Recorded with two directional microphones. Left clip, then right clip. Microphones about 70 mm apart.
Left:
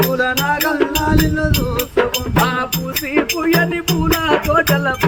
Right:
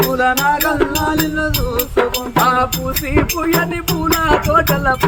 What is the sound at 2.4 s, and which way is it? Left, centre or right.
Music, centre.